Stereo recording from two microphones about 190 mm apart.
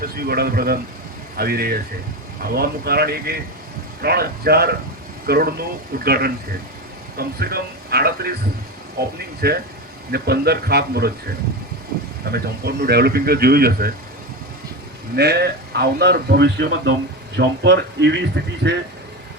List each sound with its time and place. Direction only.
0.0 s a man's voice: 55° right (ahead or behind)
12.2 s speech: 55° right (ahead or behind)
15.1 s a man's voice: 60° right (ahead or behind)